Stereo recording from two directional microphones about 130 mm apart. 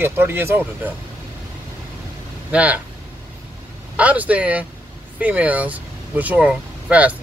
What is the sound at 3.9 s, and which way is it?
Speech, 10° right (ahead or behind).